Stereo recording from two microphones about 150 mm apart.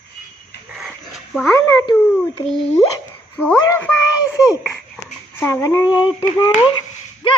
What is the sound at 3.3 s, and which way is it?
Speech, 5° left (ahead or behind).